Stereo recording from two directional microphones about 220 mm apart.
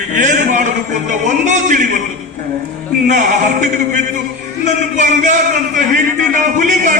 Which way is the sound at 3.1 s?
35° right (ahead or behind).